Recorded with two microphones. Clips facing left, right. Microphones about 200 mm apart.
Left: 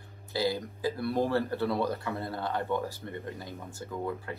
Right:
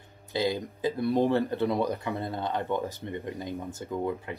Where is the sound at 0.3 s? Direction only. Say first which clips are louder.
Right 2 dB; 20° right (ahead or behind).